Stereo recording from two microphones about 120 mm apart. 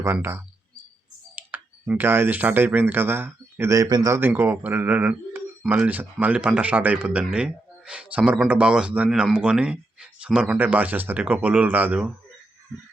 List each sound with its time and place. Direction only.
0.0 s speech: 20° right (ahead or behind)
1.5 s speech: 15° right (ahead or behind); by 4.1 s 30° right (ahead or behind)
4.1 s speech: 20° right (ahead or behind)
12.7 s a sound: centre (ahead or behind)